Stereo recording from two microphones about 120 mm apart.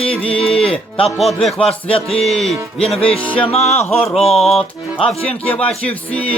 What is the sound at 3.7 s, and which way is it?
Music, 55° left (ahead or behind).